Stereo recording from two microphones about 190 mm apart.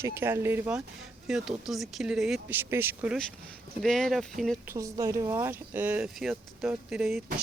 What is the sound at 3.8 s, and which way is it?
Speech, centre (ahead or behind).